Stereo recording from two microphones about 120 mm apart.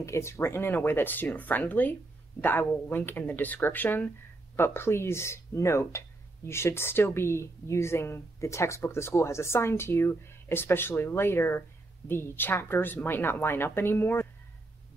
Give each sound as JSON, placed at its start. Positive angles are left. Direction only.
{"t": 0.0, "sound": "speech", "side_deg": 25}